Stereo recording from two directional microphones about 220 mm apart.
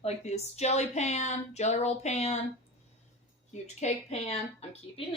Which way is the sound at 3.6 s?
30° left (ahead or behind).